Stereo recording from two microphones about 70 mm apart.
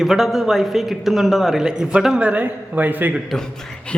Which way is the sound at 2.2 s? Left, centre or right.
Right.